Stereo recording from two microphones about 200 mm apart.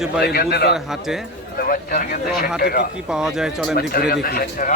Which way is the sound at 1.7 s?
45° left (ahead or behind).